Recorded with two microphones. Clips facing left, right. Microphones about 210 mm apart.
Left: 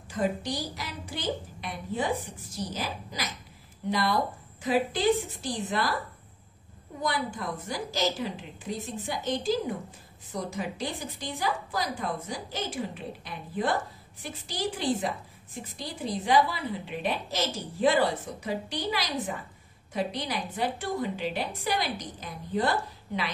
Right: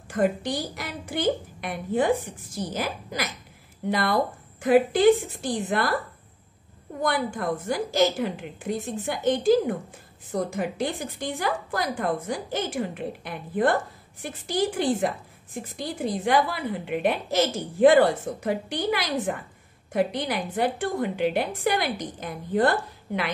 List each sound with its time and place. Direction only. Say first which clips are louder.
0.1 s a woman's voice: right 5 dB; 55° right (ahead or behind)
7.0 s a woman's voice: right 5 dB; 55° right (ahead or behind)